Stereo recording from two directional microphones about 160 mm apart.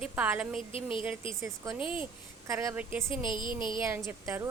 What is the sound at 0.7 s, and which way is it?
Speech, 35° left (ahead or behind).